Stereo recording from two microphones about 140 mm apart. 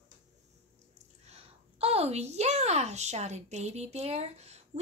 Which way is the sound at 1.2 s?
45° right (ahead or behind).